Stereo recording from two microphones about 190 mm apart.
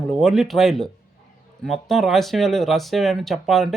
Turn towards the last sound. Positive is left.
turn(degrees=0)  # may be behind; listen again after turning